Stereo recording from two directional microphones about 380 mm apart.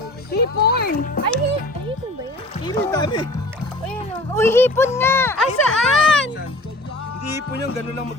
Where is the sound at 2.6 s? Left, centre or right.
Centre.